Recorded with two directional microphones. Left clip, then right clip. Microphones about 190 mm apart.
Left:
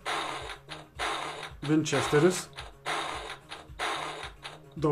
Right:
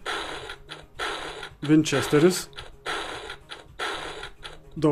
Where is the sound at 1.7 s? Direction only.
40° right (ahead or behind).